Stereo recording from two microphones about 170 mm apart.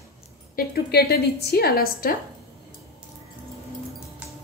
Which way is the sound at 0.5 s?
65° left (ahead or behind).